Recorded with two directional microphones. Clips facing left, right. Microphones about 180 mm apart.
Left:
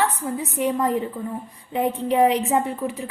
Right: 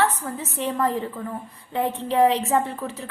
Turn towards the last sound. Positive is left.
turn(degrees=15)  # may be behind; listen again after turning